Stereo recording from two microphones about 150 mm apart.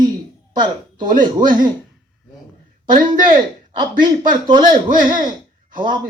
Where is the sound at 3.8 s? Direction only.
30° right (ahead or behind).